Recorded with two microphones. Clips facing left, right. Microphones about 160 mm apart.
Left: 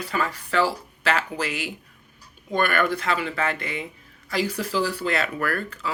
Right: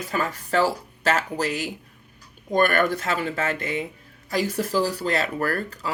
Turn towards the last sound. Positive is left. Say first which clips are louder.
# right 1 dB
turn(degrees=-40)  # may be behind; listen again after turning